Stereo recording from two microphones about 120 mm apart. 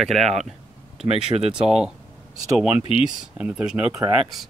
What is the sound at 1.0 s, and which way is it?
Speech, 55° right (ahead or behind).